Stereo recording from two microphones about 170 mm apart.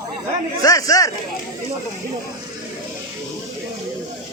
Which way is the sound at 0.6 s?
20° left (ahead or behind).